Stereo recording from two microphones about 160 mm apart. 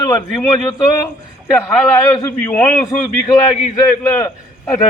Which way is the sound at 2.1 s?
20° left (ahead or behind).